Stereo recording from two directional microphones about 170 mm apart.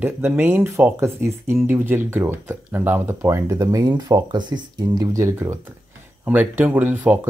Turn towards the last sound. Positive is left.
turn(degrees=-10)  # may be behind; listen again after turning